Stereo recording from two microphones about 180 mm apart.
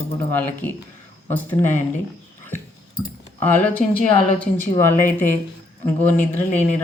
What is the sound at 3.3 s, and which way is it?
Speech, 10° left (ahead or behind).